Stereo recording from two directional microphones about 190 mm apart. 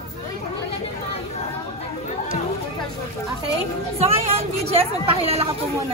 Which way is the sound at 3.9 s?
30° right (ahead or behind).